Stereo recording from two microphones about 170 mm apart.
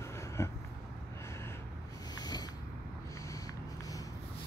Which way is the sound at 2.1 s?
25° left (ahead or behind).